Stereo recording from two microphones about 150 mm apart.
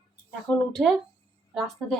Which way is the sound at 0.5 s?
10° left (ahead or behind).